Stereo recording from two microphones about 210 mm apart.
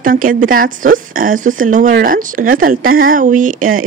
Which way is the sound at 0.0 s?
40° right (ahead or behind).